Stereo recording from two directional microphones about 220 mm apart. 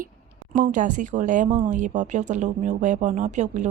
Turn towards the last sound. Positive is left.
turn(degrees=-35)  # may be behind; listen again after turning